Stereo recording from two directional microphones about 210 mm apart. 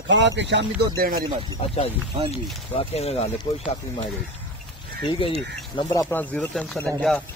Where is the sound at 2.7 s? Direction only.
30° left (ahead or behind).